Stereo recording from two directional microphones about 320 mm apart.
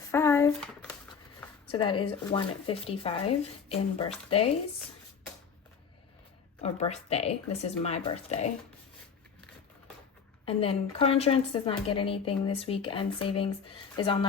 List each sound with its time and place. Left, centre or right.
0.1 s shuffling cards: centre
1.6 s a woman's voice: centre
6.6 s speech: centre
10.4 s a woman's voice: centre